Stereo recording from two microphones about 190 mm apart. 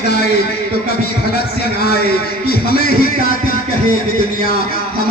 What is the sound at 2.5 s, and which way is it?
Music, 55° left (ahead or behind).